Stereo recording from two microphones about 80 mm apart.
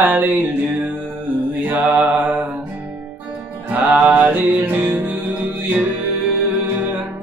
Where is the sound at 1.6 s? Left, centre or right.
Centre.